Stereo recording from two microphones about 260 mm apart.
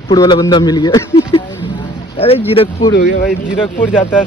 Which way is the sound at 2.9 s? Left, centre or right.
Left.